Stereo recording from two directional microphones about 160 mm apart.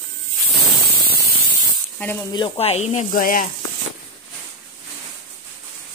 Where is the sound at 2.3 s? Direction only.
35° left (ahead or behind); by 3.4 s 60° left (ahead or behind).